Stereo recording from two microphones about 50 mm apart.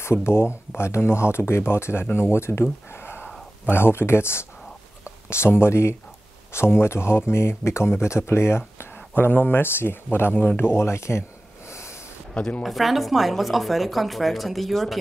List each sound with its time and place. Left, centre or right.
0.0 s speech: left
2.9 s a sound: left
3.6 s speech: left
8.9 s speech: left
11.7 s a sound: left
12.4 s a woman's voice: left
12.6 s speech: centre